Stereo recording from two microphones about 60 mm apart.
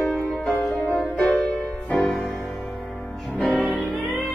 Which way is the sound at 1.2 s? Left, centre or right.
Left.